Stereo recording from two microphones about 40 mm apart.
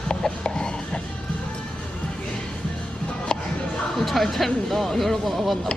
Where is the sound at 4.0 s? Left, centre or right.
Centre.